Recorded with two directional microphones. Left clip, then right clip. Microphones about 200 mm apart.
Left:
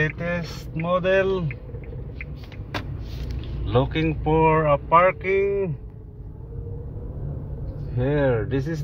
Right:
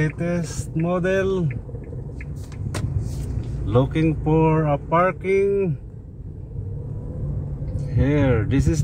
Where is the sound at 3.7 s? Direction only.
10° right (ahead or behind).